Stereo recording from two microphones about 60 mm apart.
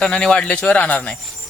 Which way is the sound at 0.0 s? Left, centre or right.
Centre.